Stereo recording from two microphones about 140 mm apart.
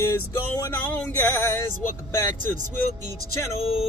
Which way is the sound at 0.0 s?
20° left (ahead or behind).